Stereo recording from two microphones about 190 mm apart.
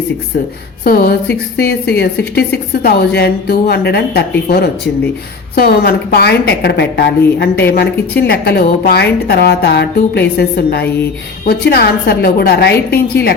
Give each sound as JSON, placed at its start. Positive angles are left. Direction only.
{"t": 0.3, "sound": "a woman's voice", "side_deg": 55}